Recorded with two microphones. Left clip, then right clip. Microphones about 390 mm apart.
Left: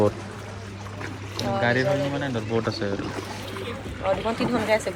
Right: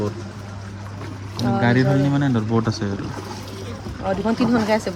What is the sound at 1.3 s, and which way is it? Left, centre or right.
Speech, centre.